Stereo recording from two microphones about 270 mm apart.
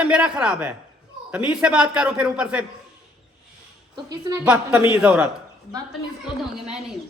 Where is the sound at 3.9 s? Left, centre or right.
Centre.